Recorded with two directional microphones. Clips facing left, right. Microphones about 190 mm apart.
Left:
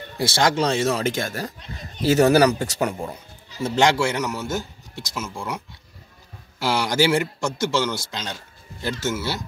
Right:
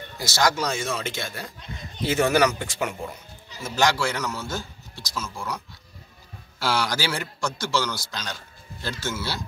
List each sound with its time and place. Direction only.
0.2 s speech: 30° left (ahead or behind)
3.6 s a man's voice: 25° left (ahead or behind)
6.6 s a man's voice: 20° left (ahead or behind)